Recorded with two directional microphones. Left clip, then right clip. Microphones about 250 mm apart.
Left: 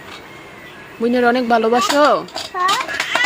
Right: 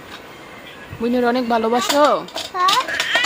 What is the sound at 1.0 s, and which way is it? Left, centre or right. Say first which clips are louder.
Speech: left 3 dB; centre.